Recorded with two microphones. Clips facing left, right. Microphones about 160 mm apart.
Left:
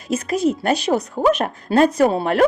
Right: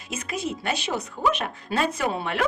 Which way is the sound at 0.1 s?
40° left (ahead or behind).